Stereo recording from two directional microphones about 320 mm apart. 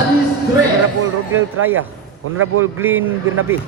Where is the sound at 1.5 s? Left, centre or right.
Right.